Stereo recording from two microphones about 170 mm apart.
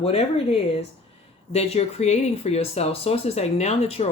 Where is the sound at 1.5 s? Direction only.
40° left (ahead or behind).